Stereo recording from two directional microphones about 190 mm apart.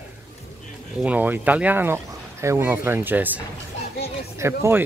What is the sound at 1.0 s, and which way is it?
Speech, 10° right (ahead or behind).